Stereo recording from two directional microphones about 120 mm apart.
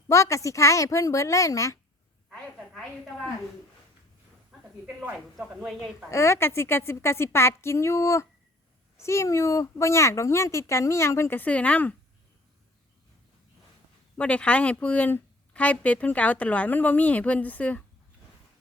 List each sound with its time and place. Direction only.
0.1 s speech: 25° left (ahead or behind)
2.3 s a woman's voice: 10° left (ahead or behind)
5.5 s a woman's voice: centre (ahead or behind)
6.1 s speech: 25° left (ahead or behind)
14.2 s speech: 10° left (ahead or behind)